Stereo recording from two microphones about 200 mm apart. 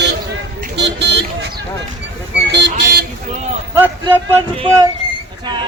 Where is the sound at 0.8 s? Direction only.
60° right (ahead or behind).